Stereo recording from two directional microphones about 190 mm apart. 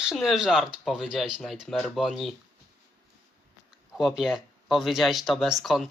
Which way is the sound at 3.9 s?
Centre (ahead or behind).